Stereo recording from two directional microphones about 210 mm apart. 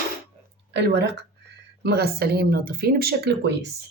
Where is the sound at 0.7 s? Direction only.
55° right (ahead or behind).